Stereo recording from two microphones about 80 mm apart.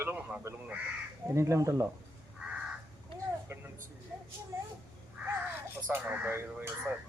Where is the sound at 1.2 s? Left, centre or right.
Right.